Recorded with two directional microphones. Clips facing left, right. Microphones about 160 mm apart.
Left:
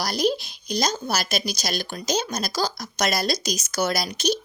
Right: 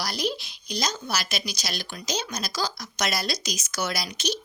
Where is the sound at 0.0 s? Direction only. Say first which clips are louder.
Left 6 dB; 45° left (ahead or behind).